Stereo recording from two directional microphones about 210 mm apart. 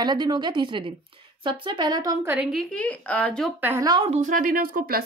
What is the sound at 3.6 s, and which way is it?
Speech, 10° right (ahead or behind).